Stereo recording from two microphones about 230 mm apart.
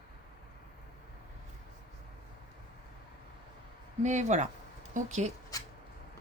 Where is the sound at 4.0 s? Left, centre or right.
Right.